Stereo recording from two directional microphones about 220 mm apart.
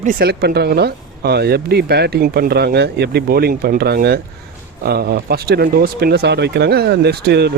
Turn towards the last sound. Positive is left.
turn(degrees=-50)  # may be behind; listen again after turning